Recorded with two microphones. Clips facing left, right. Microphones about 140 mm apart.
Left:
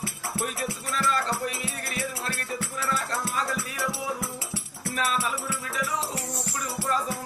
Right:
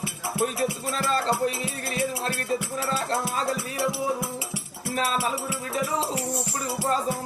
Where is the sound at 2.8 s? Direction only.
35° right (ahead or behind).